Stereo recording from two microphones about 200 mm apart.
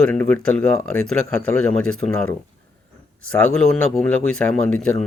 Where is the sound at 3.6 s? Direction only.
5° left (ahead or behind).